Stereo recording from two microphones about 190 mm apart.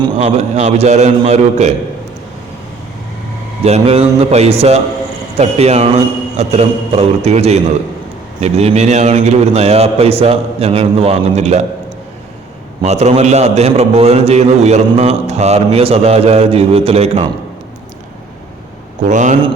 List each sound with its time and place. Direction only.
0.2 s a man's voice: 35° right (ahead or behind)
3.6 s a man's voice: 35° right (ahead or behind)
12.8 s a man's voice: 35° right (ahead or behind)
19.0 s a man's voice: 40° right (ahead or behind)